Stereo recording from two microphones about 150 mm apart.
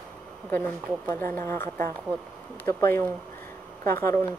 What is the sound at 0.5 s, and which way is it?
A woman's voice, 15° left (ahead or behind).